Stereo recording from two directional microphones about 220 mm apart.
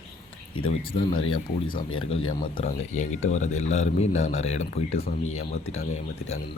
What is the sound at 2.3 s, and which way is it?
Speech, 25° left (ahead or behind).